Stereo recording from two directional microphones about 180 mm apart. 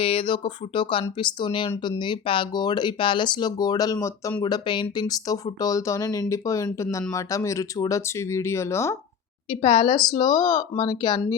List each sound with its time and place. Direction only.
0.0 s speech: 30° left (ahead or behind)
3.9 s speech: 10° left (ahead or behind)
4.4 s speech: 25° left (ahead or behind)
9.5 s speech: 30° left (ahead or behind)